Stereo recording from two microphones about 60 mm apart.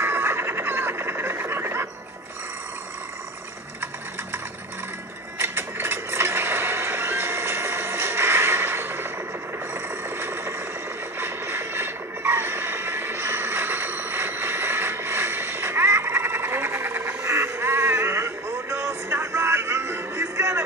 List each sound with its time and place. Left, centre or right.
0.0 s a sound: right
5.4 s a sound: right
9.8 s vehicle: right
11.1 s music: right
16.0 s frog: right
17.5 s music: right
19.1 s vehicle: right
19.9 s music: right